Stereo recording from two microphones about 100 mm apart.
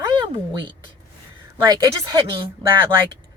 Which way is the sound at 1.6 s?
40° right (ahead or behind).